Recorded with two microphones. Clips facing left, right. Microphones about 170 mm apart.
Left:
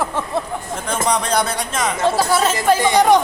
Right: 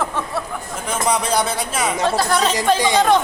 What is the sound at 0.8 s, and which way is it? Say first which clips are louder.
Speech: even; 5° right (ahead or behind).